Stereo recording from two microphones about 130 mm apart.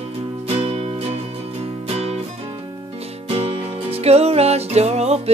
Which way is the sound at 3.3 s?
50° right (ahead or behind).